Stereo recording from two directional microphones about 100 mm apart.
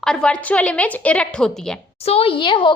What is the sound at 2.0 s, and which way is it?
Speech, 75° left (ahead or behind).